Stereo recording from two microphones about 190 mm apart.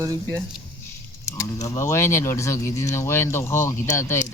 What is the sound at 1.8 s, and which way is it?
Speech, 15° left (ahead or behind).